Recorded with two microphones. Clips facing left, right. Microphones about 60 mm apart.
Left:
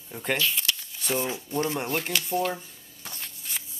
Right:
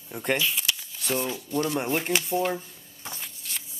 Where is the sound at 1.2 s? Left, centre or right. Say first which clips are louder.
Right 1 dB; left.